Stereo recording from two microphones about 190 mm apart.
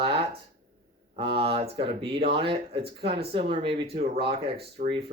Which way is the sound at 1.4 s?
30° right (ahead or behind).